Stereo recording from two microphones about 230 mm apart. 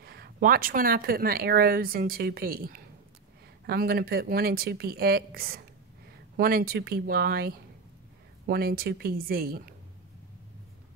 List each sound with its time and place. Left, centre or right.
0.0 s speech: right